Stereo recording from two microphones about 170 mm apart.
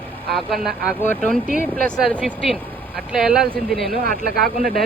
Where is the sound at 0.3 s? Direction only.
Centre (ahead or behind).